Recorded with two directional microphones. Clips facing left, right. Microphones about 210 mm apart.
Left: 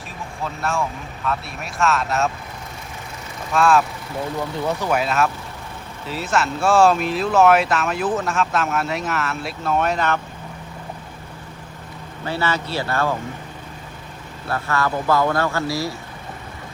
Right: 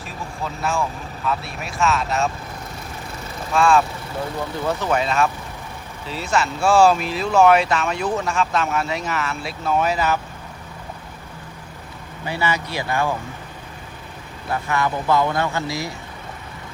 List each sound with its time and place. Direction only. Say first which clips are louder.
0.4 s speech: even; centre (ahead or behind)
3.5 s speech: even; centre (ahead or behind)
12.2 s speech: even; 15° right (ahead or behind)
14.5 s speech: even; 20° right (ahead or behind)